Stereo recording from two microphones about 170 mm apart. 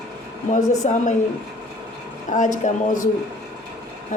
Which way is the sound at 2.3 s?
50° left (ahead or behind).